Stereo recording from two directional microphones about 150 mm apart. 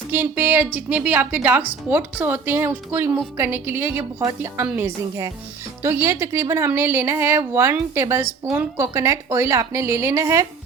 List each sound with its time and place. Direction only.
0.1 s a woman's voice: 10° right (ahead or behind)